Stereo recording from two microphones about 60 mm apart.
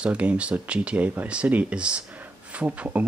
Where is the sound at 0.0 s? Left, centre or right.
Centre.